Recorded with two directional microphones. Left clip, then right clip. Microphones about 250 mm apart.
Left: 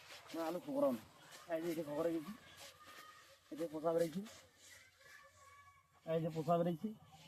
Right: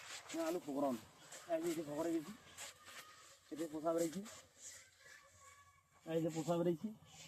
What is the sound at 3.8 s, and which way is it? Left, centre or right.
Speech, left.